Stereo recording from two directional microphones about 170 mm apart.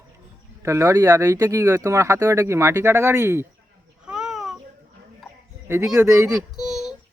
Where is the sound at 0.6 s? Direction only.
15° right (ahead or behind).